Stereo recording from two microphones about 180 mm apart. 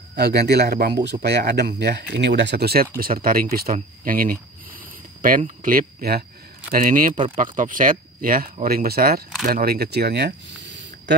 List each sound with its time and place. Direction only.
0.1 s speech: 65° right (ahead or behind)
3.7 s a sound: 50° right (ahead or behind)
5.6 s speech: 50° right (ahead or behind); by 11.1 s 80° right